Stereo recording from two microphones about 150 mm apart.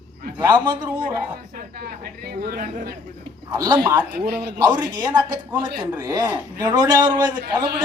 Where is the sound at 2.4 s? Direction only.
75° right (ahead or behind).